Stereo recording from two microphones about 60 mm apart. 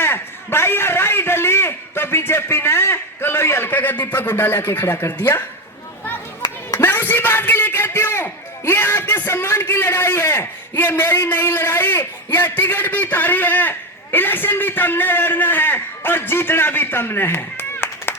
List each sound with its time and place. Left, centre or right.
0.0 s a sound: left
4.1 s speech: left
6.7 s a man's voice: left